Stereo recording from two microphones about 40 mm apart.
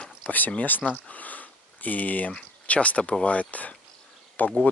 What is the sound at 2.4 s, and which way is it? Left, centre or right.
Speech, left.